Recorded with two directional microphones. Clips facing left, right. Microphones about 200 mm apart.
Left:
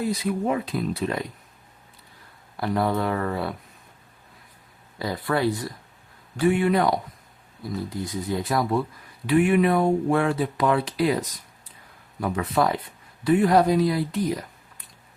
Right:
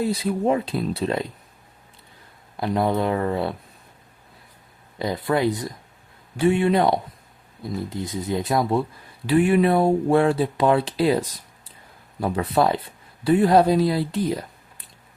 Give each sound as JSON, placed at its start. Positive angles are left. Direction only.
{"t": 0.1, "sound": "speech", "side_deg": -30}
{"t": 2.6, "sound": "speech", "side_deg": -20}
{"t": 4.9, "sound": "speech", "side_deg": -20}